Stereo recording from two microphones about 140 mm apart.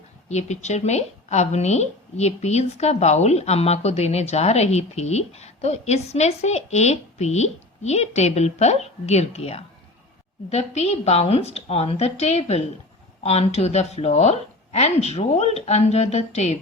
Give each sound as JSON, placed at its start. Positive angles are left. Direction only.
{"t": 0.3, "sound": "speech", "side_deg": 55}